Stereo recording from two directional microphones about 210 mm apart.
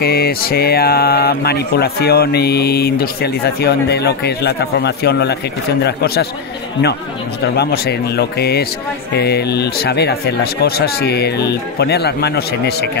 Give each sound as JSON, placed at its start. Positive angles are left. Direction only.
{"t": 0.0, "sound": "speech", "side_deg": 50}
{"t": 7.4, "sound": "speech", "side_deg": 50}